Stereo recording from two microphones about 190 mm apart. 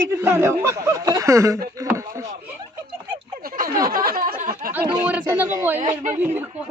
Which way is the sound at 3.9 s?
50° right (ahead or behind).